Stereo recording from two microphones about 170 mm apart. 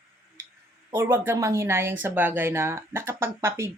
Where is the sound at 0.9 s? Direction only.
15° right (ahead or behind).